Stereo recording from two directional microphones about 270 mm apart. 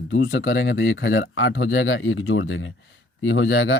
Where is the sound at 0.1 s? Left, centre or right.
Left.